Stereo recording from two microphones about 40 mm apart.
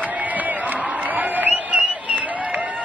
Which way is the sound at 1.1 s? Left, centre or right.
Right.